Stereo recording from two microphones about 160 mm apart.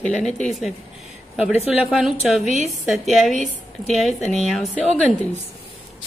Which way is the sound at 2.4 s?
45° left (ahead or behind).